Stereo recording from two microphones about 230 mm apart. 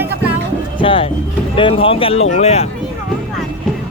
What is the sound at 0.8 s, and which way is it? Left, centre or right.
Speech, left.